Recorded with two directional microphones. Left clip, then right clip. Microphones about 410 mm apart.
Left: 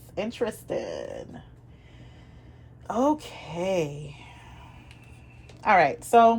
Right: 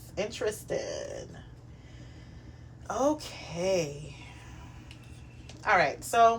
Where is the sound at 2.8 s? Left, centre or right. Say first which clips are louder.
Left 4 dB; left.